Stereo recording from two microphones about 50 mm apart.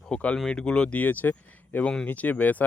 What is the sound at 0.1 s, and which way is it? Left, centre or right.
Speech, left.